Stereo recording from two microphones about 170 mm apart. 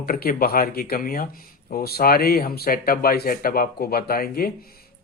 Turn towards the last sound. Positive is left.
turn(degrees=60)  # may be behind; listen again after turning